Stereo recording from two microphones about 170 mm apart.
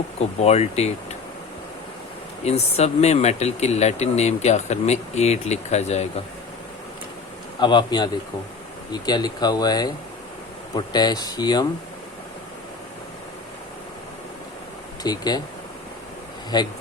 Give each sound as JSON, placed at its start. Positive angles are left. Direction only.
{"t": 0.2, "sound": "speech", "side_deg": 40}
{"t": 2.4, "sound": "speech", "side_deg": 40}
{"t": 7.6, "sound": "speech", "side_deg": 25}
{"t": 15.0, "sound": "speech", "side_deg": 25}
{"t": 16.5, "sound": "speech", "side_deg": 25}